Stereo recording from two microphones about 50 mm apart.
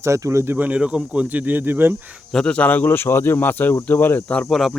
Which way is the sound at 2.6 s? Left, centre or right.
Left.